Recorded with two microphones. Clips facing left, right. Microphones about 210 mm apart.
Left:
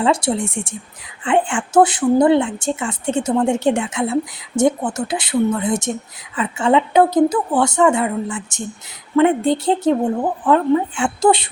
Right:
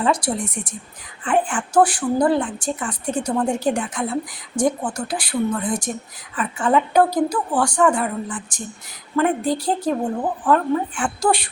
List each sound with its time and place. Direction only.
0.0 s a woman's voice: 25° left (ahead or behind)